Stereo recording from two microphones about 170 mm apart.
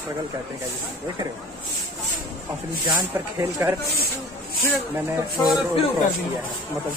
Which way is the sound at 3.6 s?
10° right (ahead or behind).